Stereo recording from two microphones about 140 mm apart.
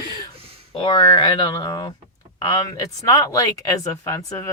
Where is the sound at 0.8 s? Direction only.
30° left (ahead or behind).